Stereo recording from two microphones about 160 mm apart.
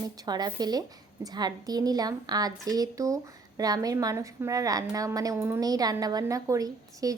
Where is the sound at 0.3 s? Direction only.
25° right (ahead or behind).